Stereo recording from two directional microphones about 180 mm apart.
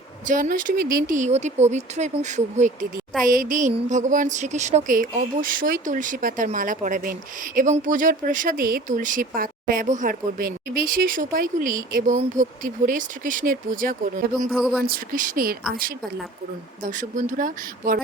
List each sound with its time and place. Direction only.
0.3 s speech: 45° right (ahead or behind)
14.5 s speech: centre (ahead or behind)
14.8 s speech: 55° right (ahead or behind)
16.8 s speech: 45° right (ahead or behind)